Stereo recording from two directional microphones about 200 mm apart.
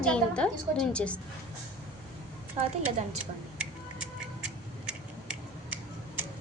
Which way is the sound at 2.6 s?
30° right (ahead or behind).